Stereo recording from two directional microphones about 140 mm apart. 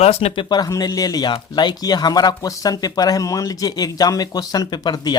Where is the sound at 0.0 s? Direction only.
50° left (ahead or behind).